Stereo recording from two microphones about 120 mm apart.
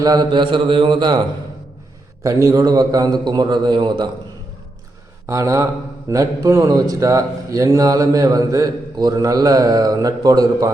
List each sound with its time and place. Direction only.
0.0 s a man's voice: 35° right (ahead or behind)
2.2 s a man's voice: 30° right (ahead or behind)
5.2 s speech: 25° right (ahead or behind)